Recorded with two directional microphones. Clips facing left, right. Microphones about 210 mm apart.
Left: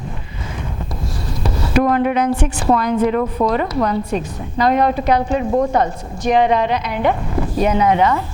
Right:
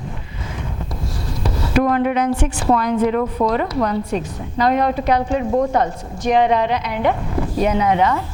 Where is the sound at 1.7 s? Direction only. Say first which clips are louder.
Left 1 dB; 15° left (ahead or behind).